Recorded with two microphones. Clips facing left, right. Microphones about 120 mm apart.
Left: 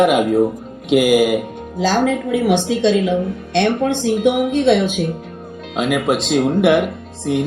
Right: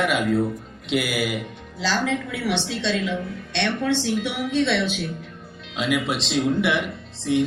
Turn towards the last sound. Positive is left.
turn(degrees=50)  # may be behind; listen again after turning